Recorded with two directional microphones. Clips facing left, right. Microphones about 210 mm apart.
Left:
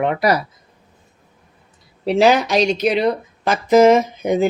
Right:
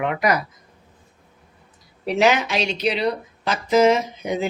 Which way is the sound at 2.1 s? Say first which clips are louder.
Left 5 dB; 35° left (ahead or behind).